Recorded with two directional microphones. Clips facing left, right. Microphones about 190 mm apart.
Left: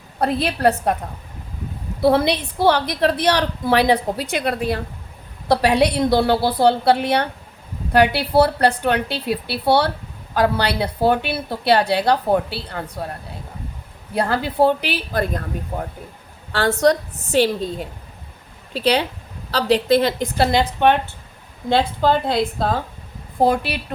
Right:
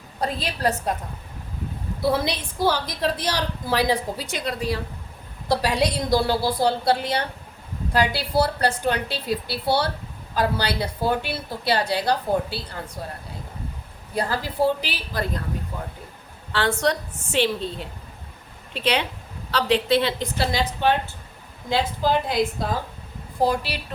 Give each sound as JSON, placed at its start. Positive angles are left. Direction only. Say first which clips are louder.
{"t": 0.2, "sound": "a woman's voice", "louder": "left 7 dB", "side_deg": 60}
{"t": 2.0, "sound": "a woman's voice", "louder": "left 7 dB", "side_deg": 60}
{"t": 14.2, "sound": "a woman's voice", "louder": "left 5 dB", "side_deg": 60}
{"t": 16.5, "sound": "a woman's voice", "louder": "left 6 dB", "side_deg": 40}